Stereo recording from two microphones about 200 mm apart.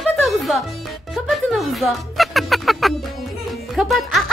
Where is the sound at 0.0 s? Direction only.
Centre (ahead or behind).